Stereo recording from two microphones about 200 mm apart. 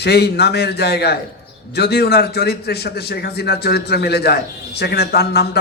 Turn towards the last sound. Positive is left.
turn(degrees=55)  # may be behind; listen again after turning